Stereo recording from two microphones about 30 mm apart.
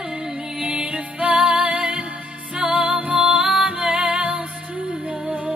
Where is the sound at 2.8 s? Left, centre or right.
Right.